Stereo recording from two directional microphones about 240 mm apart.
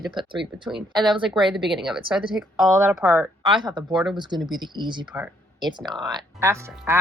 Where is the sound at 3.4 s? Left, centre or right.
Centre.